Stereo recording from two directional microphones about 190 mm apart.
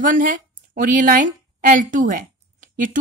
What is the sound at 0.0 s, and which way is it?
A woman's voice, 45° right (ahead or behind).